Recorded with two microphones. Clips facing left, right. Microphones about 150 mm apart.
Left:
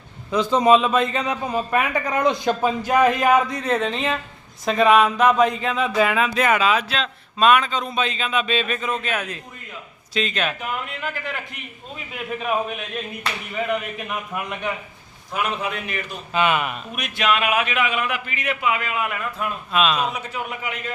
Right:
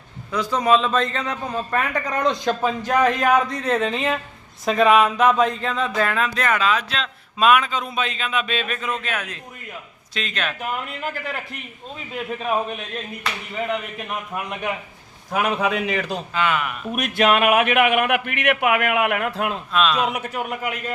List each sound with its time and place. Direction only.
0.3 s speech: 20° left (ahead or behind); by 10.8 s centre (ahead or behind)
11.0 s a man's voice: 35° right (ahead or behind)
14.3 s speech: centre (ahead or behind)
15.4 s a man's voice: 90° right
16.3 s speech: 20° left (ahead or behind)
16.9 s a man's voice: 50° right (ahead or behind); by 19.5 s 85° right
19.7 s speech: 5° left (ahead or behind)
20.1 s a man's voice: 45° right (ahead or behind)